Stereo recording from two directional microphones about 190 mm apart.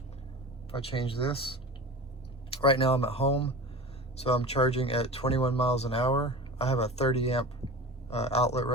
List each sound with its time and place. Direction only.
0.7 s speech: 30° left (ahead or behind)
2.6 s speech: 30° left (ahead or behind)